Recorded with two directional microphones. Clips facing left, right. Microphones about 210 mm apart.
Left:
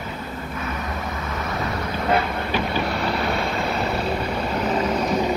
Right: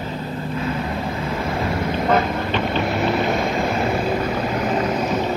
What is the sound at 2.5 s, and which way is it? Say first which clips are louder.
Boat: right 2 dB; 5° left (ahead or behind).